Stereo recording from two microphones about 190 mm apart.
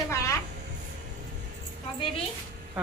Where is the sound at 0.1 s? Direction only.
15° left (ahead or behind).